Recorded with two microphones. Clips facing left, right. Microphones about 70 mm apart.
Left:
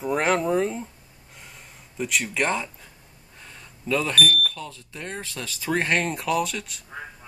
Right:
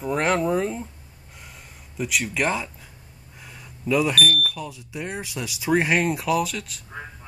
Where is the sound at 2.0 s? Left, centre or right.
Centre.